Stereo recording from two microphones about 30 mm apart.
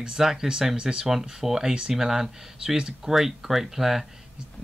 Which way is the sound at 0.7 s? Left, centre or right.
Right.